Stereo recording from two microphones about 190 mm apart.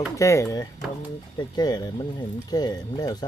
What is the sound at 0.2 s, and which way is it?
Speech, 15° left (ahead or behind).